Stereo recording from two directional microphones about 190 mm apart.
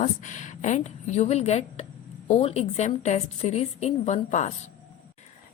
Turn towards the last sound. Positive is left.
turn(degrees=40)  # may be behind; listen again after turning